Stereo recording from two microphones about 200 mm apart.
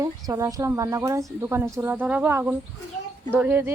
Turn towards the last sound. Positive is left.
turn(degrees=-10)  # may be behind; listen again after turning